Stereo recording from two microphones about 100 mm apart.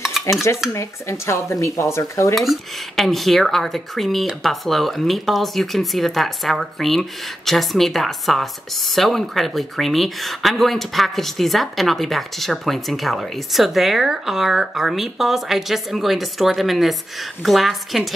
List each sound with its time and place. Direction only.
0.3 s dishes: 30° left (ahead or behind)
2.3 s speech: centre (ahead or behind)